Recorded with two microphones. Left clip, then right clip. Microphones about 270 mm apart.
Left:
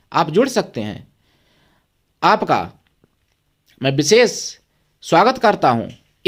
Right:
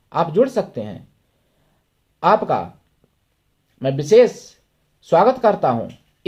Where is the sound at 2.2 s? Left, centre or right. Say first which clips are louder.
Left 1 dB; left.